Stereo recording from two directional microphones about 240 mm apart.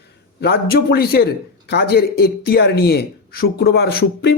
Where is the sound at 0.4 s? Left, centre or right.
Left.